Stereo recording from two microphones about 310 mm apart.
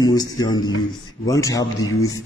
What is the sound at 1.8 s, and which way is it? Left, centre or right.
Speech, left.